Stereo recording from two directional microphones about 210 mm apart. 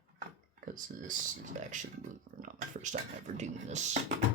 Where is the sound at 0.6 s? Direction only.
40° right (ahead or behind).